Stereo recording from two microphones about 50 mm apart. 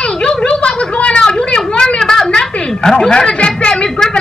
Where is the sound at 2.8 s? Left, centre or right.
Centre.